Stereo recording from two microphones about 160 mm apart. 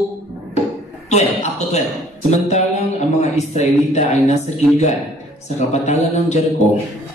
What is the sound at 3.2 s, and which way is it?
Speech, 45° left (ahead or behind).